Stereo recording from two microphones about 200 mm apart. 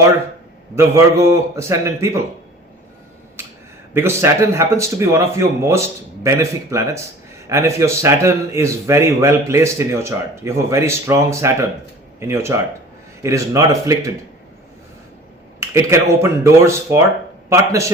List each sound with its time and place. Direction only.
0.8 s a man's voice: 15° right (ahead or behind)
3.9 s a man's voice: 15° right (ahead or behind)
15.6 s a man's voice: 15° right (ahead or behind)